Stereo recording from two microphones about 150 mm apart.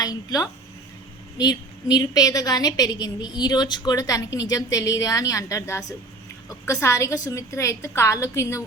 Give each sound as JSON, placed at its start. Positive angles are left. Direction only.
{"t": 0.0, "sound": "a woman's voice", "side_deg": 25}